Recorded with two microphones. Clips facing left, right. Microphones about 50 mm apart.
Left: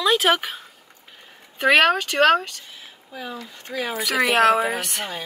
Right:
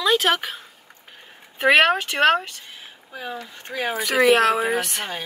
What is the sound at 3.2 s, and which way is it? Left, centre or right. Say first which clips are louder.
Speech: right 1 dB; right.